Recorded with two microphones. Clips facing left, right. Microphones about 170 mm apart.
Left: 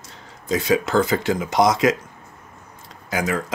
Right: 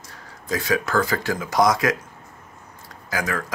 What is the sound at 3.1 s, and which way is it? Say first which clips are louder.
Speech: left 3 dB; 20° left (ahead or behind).